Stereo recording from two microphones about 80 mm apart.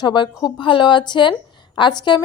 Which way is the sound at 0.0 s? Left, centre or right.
Left.